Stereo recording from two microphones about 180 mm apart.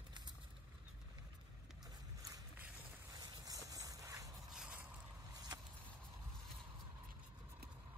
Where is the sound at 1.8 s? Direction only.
20° right (ahead or behind).